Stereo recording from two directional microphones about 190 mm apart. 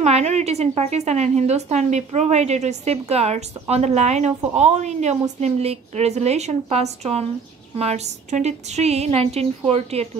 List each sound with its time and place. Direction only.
0.0 s a woman's voice: 35° right (ahead or behind)